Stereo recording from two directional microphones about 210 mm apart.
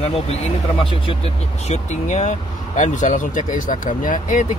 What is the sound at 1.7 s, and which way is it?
Speech, 35° left (ahead or behind).